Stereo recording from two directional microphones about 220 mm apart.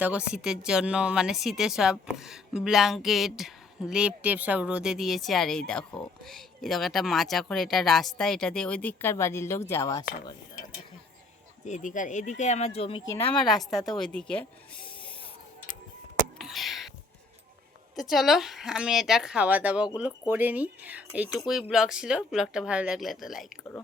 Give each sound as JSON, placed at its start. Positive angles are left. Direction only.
{"t": 0.0, "sound": "speech", "side_deg": -5}
{"t": 11.6, "sound": "speech", "side_deg": 35}
{"t": 13.5, "sound": "speech", "side_deg": 0}
{"t": 16.4, "sound": "a sound", "side_deg": 0}
{"t": 17.9, "sound": "speech", "side_deg": 0}